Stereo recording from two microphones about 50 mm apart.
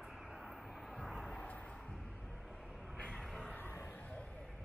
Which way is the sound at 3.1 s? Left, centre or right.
Centre.